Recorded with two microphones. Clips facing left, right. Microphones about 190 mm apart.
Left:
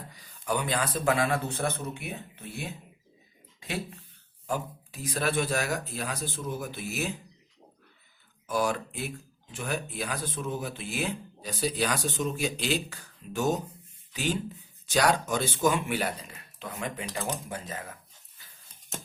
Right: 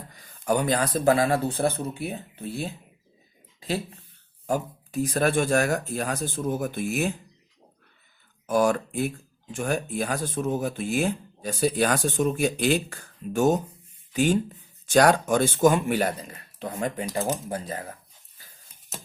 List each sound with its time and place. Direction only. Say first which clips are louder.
0.1 s speech: right 6 dB; 50° right (ahead or behind); by 2.7 s 35° right (ahead or behind)
4.4 s speech: right 5 dB; 45° right (ahead or behind)
8.4 s speech: right 6 dB; 50° right (ahead or behind)